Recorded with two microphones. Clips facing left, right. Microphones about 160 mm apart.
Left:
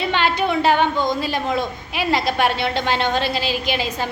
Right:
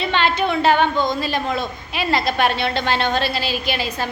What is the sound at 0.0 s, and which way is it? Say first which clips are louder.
A woman's voice: even; 10° left (ahead or behind).